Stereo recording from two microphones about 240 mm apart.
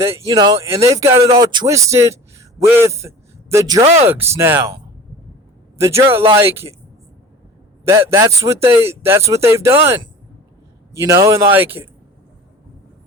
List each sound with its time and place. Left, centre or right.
0.0 s a man's voice: centre
3.8 s speech: right
4.1 s speech: centre
5.8 s speech: centre
7.9 s speech: centre